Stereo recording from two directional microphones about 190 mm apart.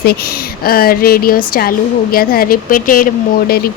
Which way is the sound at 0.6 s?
50° left (ahead or behind).